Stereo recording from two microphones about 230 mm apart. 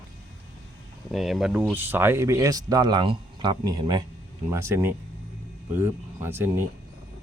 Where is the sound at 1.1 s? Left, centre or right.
Centre.